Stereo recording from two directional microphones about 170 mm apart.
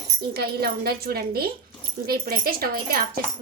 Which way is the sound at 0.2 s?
65° right (ahead or behind).